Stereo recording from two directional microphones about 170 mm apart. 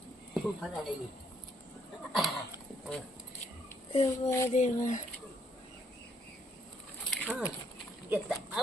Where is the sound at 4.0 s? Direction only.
20° left (ahead or behind).